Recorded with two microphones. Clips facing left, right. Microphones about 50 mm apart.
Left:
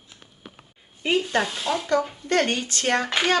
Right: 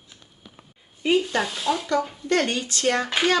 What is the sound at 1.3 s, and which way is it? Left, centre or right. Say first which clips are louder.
Speech: even; centre.